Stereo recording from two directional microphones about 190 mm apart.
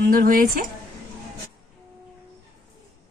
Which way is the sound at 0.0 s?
50° right (ahead or behind).